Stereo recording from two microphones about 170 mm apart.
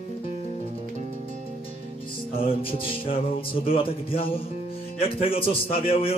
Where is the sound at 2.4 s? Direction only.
35° left (ahead or behind).